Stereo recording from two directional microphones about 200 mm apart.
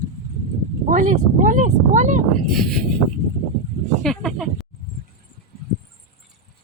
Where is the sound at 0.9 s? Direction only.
40° right (ahead or behind).